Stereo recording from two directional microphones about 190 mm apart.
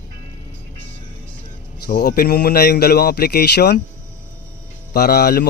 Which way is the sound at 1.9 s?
50° left (ahead or behind).